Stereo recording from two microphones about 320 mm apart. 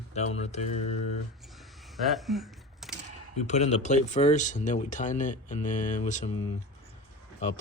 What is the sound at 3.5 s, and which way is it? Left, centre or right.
Speech, left.